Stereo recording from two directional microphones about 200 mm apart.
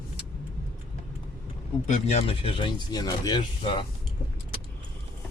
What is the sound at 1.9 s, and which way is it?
Speech, 30° left (ahead or behind).